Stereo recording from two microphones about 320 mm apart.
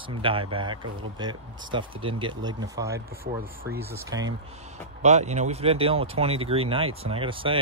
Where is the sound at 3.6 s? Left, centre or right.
Right.